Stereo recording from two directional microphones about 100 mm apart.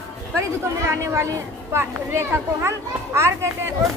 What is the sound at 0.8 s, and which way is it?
Speech, 30° right (ahead or behind).